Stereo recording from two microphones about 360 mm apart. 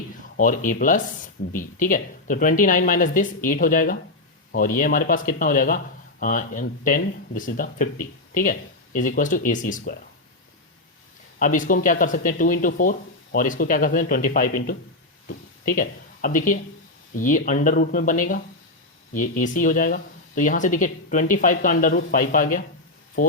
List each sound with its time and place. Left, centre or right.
0.3 s speech: left
11.3 s speech: left